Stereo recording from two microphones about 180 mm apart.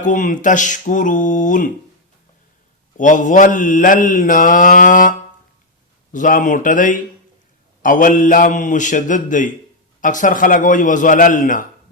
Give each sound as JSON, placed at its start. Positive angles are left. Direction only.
{"t": 0.0, "sound": "mantra", "side_deg": 45}
{"t": 3.0, "sound": "mantra", "side_deg": 45}